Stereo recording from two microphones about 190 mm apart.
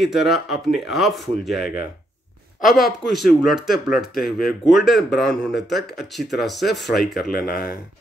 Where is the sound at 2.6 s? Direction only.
Centre (ahead or behind).